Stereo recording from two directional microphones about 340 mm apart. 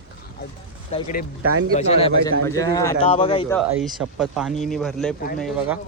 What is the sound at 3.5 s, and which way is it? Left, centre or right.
Speech, centre.